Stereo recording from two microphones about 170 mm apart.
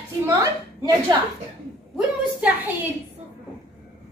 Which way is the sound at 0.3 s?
20° right (ahead or behind).